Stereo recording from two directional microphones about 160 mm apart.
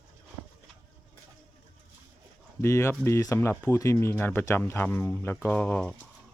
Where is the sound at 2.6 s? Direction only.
15° left (ahead or behind).